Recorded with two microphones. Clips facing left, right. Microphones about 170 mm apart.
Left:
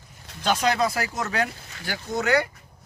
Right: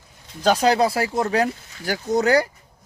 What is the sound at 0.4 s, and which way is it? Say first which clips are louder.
Speech: right 5 dB; 35° right (ahead or behind).